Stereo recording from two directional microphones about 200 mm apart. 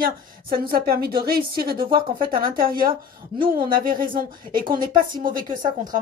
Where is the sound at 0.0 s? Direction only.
50° right (ahead or behind).